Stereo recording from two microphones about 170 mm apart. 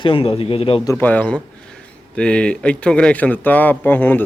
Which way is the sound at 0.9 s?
10° left (ahead or behind).